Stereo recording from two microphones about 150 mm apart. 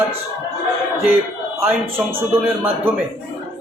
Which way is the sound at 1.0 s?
15° right (ahead or behind).